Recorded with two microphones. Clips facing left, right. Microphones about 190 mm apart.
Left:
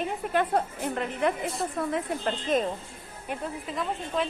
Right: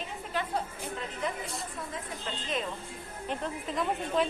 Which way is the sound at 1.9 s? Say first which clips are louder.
Left 10 dB; 50° left (ahead or behind).